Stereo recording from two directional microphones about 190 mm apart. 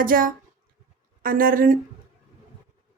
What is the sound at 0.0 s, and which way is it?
Speech, 45° right (ahead or behind).